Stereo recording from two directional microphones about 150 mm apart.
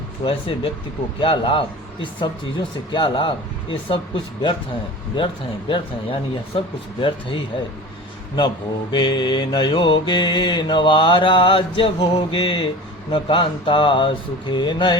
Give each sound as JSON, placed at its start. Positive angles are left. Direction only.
{"t": 0.3, "sound": "mantra", "side_deg": 40}
{"t": 8.9, "sound": "mantra", "side_deg": 30}